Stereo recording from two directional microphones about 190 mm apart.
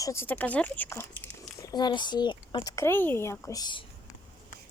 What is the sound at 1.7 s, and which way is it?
Speech, 20° left (ahead or behind).